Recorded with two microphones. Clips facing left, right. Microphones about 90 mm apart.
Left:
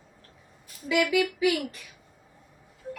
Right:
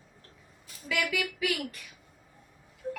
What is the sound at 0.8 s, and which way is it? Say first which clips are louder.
Speech: left 7 dB; 20° left (ahead or behind).